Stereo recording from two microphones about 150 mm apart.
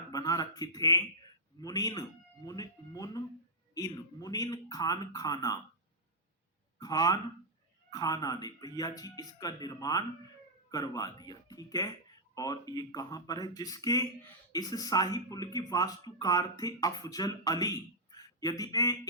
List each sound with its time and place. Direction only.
0.1 s speech: 25° left (ahead or behind)
6.7 s speech: 25° left (ahead or behind)